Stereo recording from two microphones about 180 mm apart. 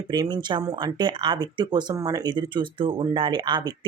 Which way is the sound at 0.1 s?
25° right (ahead or behind).